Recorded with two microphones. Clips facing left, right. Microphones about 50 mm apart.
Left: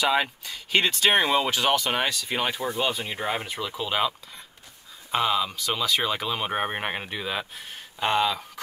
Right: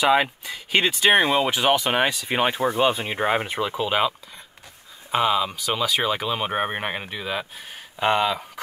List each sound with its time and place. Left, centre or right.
0.0 s speech: centre; by 3.7 s right
3.7 s speech: centre
5.1 s speech: centre
8.0 s speech: centre